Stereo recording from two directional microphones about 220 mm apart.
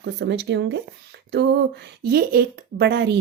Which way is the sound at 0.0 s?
50° right (ahead or behind).